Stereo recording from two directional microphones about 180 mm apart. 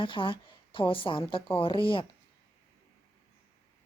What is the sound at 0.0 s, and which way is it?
Speech, 30° left (ahead or behind).